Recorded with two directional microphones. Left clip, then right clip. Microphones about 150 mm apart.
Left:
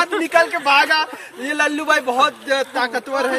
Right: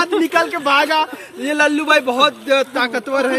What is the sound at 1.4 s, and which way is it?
A man's voice, 55° left (ahead or behind).